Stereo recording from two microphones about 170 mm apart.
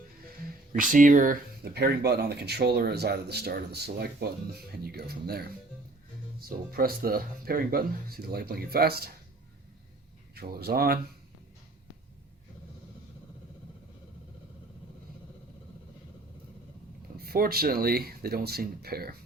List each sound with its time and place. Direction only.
0.7 s speech: 50° right (ahead or behind)
6.7 s speech: 60° right (ahead or behind)
10.3 s speech: 65° right (ahead or behind)
17.2 s speech: 60° right (ahead or behind)